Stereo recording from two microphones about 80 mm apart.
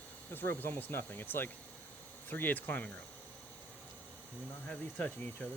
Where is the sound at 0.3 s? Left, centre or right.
Left.